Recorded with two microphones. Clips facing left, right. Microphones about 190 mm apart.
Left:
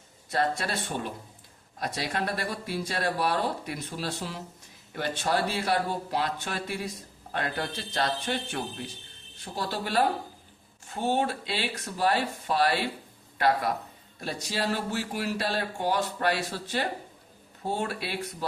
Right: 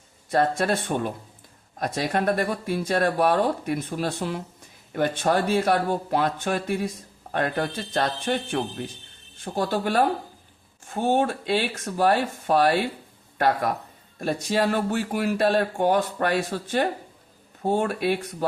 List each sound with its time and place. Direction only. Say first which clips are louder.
0.3 s speech: right 6 dB; 50° right (ahead or behind)
9.4 s speech: right 7 dB; 50° right (ahead or behind)
14.5 s speech: right 6 dB; 55° right (ahead or behind)